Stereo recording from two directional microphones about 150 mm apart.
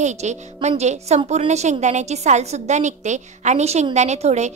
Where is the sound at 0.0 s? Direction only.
50° right (ahead or behind).